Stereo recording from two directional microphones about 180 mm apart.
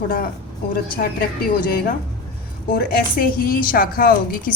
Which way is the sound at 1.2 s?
60° left (ahead or behind).